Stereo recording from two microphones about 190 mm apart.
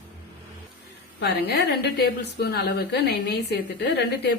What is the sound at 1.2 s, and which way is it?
A woman's voice, 60° left (ahead or behind).